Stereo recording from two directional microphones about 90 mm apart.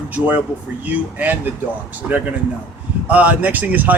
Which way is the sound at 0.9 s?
20° right (ahead or behind).